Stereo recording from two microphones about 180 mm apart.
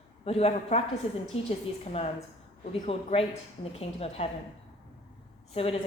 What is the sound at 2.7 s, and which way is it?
A woman's voice, 30° left (ahead or behind).